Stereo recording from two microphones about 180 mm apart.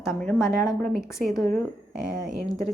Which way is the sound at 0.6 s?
Centre (ahead or behind).